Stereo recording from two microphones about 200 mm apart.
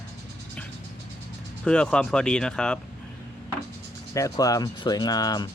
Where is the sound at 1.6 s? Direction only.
5° left (ahead or behind).